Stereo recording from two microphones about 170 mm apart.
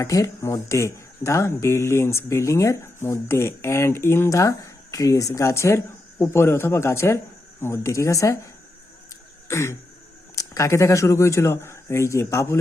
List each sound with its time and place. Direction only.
0.0 s speech: 20° left (ahead or behind)
9.5 s throat clearing: 15° left (ahead or behind)
10.3 s speech: 20° left (ahead or behind)